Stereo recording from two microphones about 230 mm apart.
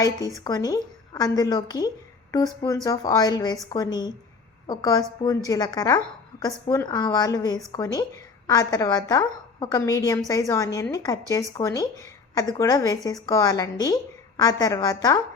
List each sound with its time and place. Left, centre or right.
0.3 s a woman's voice: centre